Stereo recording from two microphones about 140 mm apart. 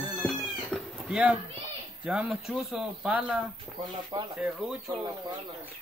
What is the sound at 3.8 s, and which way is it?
Speech, 30° right (ahead or behind).